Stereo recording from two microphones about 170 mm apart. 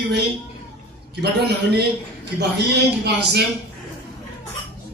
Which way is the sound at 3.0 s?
75° right (ahead or behind).